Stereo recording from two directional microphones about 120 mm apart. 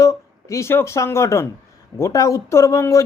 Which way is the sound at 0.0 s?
25° left (ahead or behind).